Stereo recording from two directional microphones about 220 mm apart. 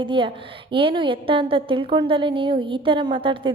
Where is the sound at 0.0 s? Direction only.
25° right (ahead or behind).